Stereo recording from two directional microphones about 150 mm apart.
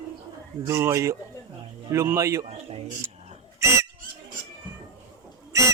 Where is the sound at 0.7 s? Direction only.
20° right (ahead or behind).